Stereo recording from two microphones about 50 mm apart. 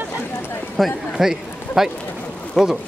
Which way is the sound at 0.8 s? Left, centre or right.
Centre.